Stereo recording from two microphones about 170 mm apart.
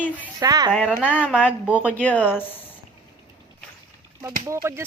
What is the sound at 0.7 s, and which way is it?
A woman's voice, 5° right (ahead or behind).